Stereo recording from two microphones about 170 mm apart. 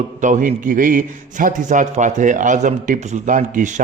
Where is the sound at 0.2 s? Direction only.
50° right (ahead or behind).